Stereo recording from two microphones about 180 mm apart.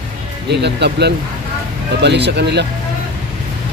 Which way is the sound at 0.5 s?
70° right (ahead or behind).